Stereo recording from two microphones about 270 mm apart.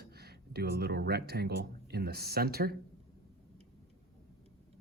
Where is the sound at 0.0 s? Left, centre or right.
Right.